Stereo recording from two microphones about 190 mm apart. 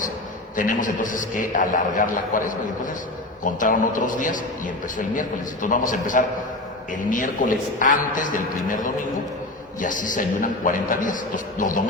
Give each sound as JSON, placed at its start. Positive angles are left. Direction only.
{"t": 0.5, "sound": "a man's voice", "side_deg": 45}